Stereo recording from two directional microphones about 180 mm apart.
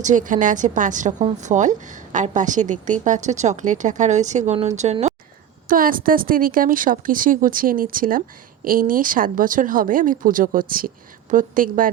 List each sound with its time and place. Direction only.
0.0 s a woman's voice: 45° right (ahead or behind)
5.6 s a woman's voice: 50° right (ahead or behind)